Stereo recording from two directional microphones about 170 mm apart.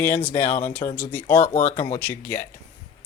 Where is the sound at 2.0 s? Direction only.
10° left (ahead or behind).